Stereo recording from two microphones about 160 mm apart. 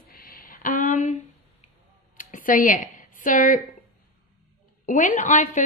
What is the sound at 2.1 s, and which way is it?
Speech, 55° left (ahead or behind).